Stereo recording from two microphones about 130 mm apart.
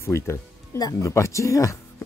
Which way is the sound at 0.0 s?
20° left (ahead or behind).